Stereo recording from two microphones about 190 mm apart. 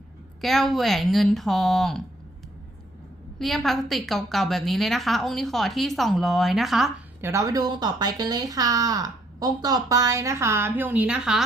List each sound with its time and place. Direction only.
0.4 s a woman's voice: centre (ahead or behind)
3.3 s a woman's voice: centre (ahead or behind)
7.2 s speech: 15° right (ahead or behind)